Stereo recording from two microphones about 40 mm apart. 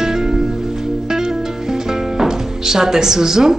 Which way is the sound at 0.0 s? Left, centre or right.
Centre.